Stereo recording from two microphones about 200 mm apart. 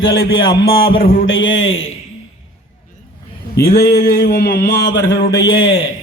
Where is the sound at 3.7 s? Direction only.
50° left (ahead or behind); by 5.7 s 70° left (ahead or behind).